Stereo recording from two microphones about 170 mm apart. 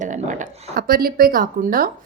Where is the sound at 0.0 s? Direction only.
45° right (ahead or behind).